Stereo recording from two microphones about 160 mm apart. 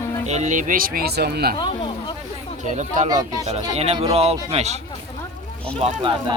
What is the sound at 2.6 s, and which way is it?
Speech, 50° right (ahead or behind).